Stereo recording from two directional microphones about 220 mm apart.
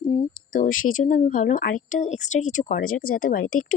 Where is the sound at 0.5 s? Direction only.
40° left (ahead or behind).